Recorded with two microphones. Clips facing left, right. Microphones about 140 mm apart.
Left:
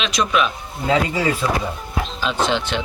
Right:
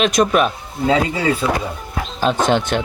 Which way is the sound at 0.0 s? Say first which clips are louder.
Right 5 dB; 50° right (ahead or behind).